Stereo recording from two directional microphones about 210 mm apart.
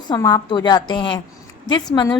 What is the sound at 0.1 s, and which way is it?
A woman's voice, 20° left (ahead or behind).